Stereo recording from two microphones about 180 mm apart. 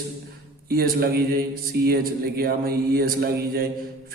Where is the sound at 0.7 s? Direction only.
60° right (ahead or behind).